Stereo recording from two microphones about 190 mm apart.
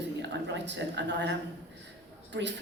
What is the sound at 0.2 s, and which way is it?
A woman's voice, 65° right (ahead or behind).